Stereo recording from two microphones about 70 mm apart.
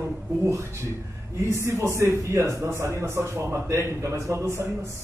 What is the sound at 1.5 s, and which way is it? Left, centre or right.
Speech, right.